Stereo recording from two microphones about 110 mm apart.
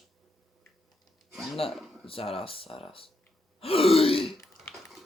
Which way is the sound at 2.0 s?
60° left (ahead or behind).